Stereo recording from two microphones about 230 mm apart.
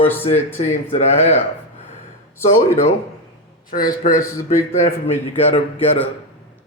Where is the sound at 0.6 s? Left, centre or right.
Left.